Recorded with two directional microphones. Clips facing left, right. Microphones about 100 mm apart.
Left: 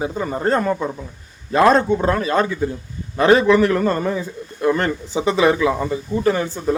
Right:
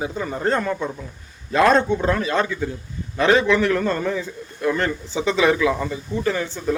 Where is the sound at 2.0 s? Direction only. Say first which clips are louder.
Left 3 dB; 40° left (ahead or behind).